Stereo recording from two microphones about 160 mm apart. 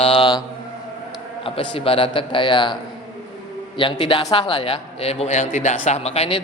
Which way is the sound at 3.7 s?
30° left (ahead or behind).